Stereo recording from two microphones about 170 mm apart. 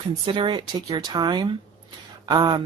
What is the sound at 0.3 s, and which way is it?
Speech, 30° right (ahead or behind).